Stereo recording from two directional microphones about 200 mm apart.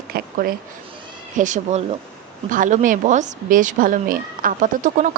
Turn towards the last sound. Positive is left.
turn(degrees=-40)  # may be behind; listen again after turning